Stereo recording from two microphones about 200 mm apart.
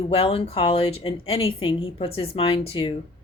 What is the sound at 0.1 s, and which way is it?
Speech, 30° left (ahead or behind).